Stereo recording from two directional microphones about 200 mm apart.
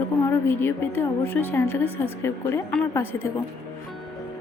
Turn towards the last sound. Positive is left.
turn(degrees=15)  # may be behind; listen again after turning